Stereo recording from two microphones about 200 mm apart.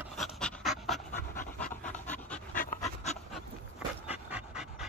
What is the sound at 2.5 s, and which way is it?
Pant, 40° left (ahead or behind).